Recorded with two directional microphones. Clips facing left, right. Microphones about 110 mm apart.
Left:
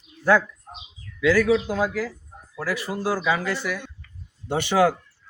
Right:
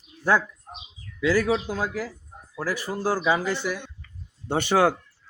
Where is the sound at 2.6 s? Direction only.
35° right (ahead or behind).